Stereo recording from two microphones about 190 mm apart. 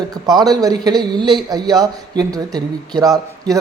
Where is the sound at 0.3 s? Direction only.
20° right (ahead or behind).